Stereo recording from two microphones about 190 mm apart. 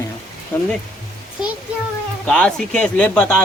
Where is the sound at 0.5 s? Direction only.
10° left (ahead or behind).